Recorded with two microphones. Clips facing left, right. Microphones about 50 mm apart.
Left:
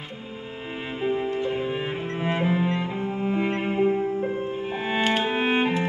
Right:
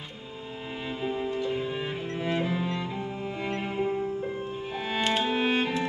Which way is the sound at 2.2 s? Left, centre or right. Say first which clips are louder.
Left 5 dB; left.